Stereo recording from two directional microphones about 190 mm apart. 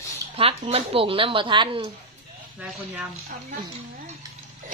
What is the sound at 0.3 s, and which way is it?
Speech, 30° right (ahead or behind).